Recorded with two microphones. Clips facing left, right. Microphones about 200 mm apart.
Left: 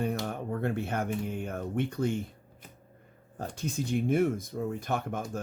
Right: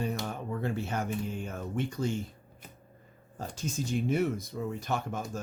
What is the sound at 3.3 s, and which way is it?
Speech, 60° left (ahead or behind).